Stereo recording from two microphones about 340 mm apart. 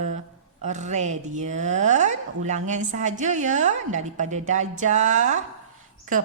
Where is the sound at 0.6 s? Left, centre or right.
Right.